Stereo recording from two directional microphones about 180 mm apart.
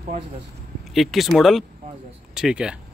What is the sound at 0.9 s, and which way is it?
A man's voice, centre (ahead or behind).